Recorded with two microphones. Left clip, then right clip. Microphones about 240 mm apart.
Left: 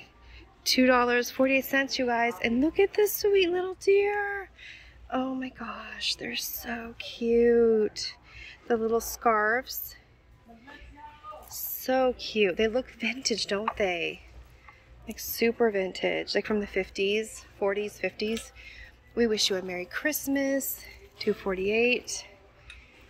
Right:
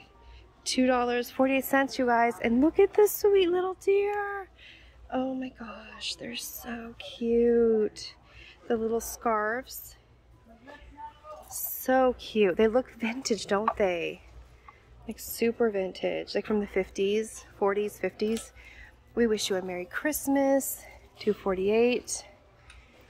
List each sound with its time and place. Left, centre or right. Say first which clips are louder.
0.7 s speech: left 3 dB; centre
11.8 s speech: right 1 dB; centre